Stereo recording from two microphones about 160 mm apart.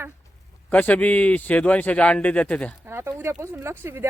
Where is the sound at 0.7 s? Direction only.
10° left (ahead or behind).